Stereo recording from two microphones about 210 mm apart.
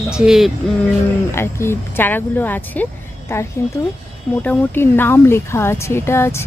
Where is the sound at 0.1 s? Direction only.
5° right (ahead or behind).